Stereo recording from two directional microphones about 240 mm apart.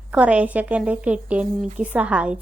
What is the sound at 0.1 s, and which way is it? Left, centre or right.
A woman's voice, centre.